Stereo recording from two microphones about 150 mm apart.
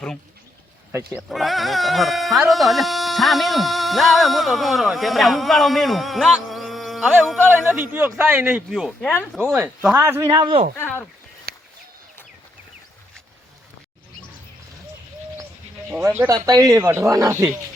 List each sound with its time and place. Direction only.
1.3 s a man's voice: centre (ahead or behind)
9.0 s speech: 10° left (ahead or behind)
9.5 s a man's voice: 15° right (ahead or behind); by 10.6 s 30° right (ahead or behind)
10.8 s a sound: 15° left (ahead or behind)
11.5 s a sound: 90° right
15.9 s speech: 15° right (ahead or behind)